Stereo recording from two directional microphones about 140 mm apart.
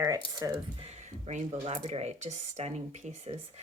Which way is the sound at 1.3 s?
55° right (ahead or behind).